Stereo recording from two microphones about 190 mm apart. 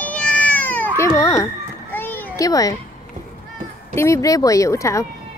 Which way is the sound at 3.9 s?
15° left (ahead or behind).